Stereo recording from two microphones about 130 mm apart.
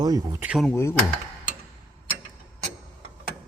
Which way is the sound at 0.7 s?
20° left (ahead or behind).